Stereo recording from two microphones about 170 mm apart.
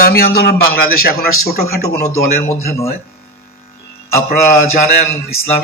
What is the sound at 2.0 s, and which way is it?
Speech, 15° left (ahead or behind).